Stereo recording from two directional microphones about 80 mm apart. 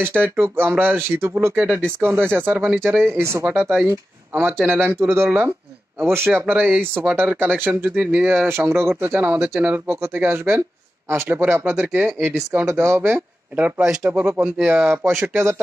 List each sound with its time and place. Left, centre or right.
0.0 s speech: right
3.4 s speech: right
13.6 s speech: right